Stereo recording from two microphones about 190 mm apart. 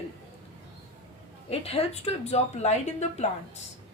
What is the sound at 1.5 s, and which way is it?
Speech, 35° left (ahead or behind).